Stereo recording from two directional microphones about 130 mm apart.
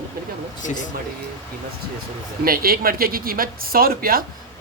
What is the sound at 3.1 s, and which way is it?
A woman's voice, 90° right.